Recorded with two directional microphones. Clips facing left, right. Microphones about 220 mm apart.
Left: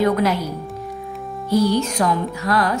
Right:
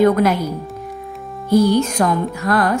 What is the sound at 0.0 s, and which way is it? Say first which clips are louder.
Speech: right 4 dB; 50° right (ahead or behind).